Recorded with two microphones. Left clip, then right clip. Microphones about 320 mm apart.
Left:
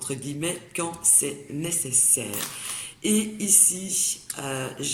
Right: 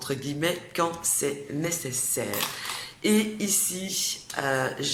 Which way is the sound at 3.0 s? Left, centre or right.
Centre.